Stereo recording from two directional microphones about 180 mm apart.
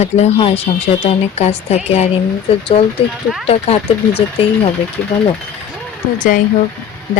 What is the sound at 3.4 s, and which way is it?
Speech, 35° left (ahead or behind).